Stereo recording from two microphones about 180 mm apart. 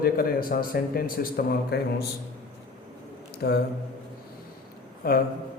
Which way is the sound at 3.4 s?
65° left (ahead or behind).